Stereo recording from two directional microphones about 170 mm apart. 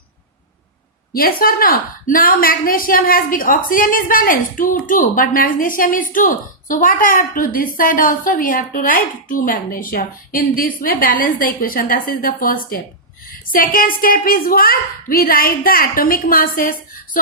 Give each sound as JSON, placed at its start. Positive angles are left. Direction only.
{"t": 1.1, "sound": "speech", "side_deg": 60}